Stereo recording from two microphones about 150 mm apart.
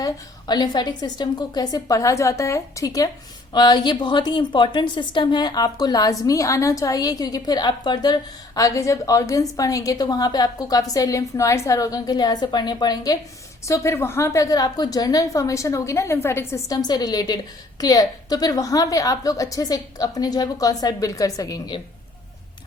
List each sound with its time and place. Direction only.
0.0 s a woman's voice: 30° left (ahead or behind)